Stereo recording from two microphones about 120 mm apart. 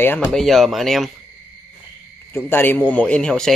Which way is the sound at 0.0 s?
15° left (ahead or behind).